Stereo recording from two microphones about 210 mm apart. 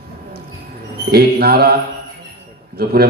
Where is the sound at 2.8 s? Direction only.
45° right (ahead or behind).